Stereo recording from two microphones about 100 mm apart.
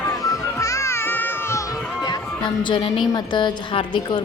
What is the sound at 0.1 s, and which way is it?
Music, 35° left (ahead or behind).